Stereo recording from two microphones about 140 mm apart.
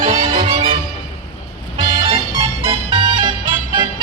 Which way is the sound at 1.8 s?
40° right (ahead or behind).